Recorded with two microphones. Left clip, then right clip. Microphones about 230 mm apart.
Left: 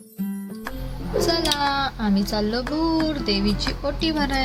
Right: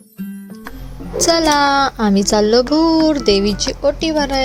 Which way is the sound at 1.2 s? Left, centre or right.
Right.